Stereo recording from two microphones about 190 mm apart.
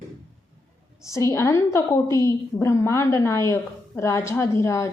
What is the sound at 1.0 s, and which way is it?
A woman's voice, 15° left (ahead or behind).